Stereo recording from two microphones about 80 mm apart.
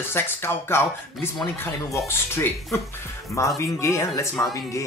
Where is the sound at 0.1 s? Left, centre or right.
Left.